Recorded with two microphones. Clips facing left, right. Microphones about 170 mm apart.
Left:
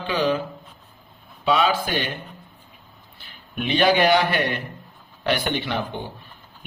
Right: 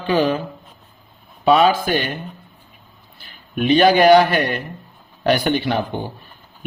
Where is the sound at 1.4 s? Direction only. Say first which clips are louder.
Right 6 dB; 45° right (ahead or behind).